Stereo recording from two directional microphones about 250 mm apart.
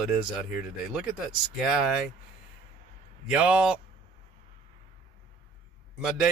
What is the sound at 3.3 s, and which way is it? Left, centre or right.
Speech, centre.